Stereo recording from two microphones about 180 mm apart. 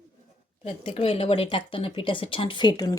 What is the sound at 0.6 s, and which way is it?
Speech, 35° left (ahead or behind).